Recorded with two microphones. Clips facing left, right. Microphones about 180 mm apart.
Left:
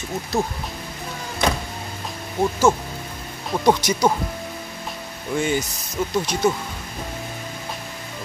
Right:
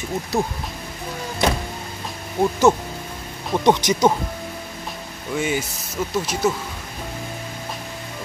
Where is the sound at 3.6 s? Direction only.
20° right (ahead or behind).